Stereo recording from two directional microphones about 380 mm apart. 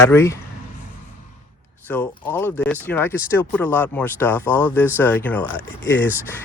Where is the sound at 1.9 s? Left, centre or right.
Centre.